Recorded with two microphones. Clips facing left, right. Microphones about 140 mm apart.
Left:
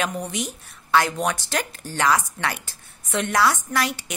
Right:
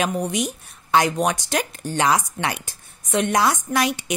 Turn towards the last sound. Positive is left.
turn(degrees=-15)  # may be behind; listen again after turning